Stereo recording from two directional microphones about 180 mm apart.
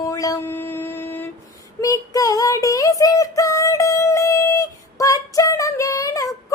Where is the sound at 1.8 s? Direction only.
20° left (ahead or behind).